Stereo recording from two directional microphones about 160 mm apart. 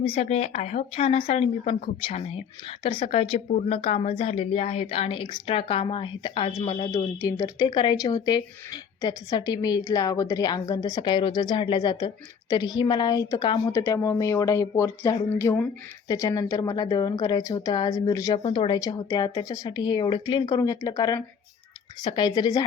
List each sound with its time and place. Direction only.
0.0 s speech: 40° left (ahead or behind)
7.2 s speech: 20° left (ahead or behind)
13.7 s speech: 20° left (ahead or behind)